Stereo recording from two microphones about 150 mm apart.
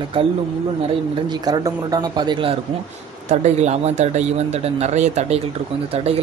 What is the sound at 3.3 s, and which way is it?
Speech, 50° right (ahead or behind).